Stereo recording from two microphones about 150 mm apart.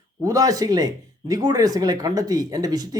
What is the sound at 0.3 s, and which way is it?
Speech, 25° right (ahead or behind).